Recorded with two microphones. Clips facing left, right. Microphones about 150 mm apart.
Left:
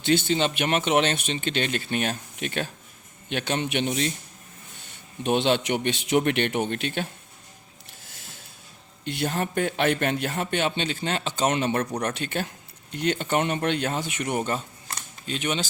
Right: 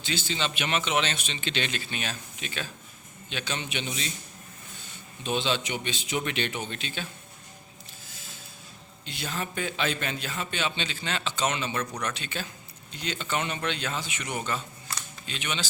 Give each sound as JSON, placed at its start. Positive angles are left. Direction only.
{"t": 0.0, "sound": "a man's voice", "side_deg": 60}
{"t": 5.2, "sound": "a man's voice", "side_deg": 60}
{"t": 9.0, "sound": "a man's voice", "side_deg": 60}